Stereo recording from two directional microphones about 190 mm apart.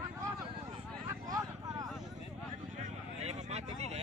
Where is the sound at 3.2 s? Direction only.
35° right (ahead or behind).